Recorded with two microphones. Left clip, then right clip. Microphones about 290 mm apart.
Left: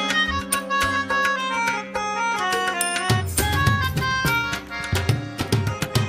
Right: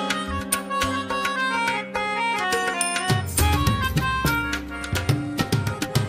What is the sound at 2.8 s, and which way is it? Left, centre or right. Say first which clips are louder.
Music: left 1 dB; centre.